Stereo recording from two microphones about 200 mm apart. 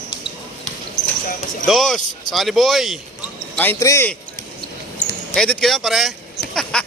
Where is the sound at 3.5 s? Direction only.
10° left (ahead or behind).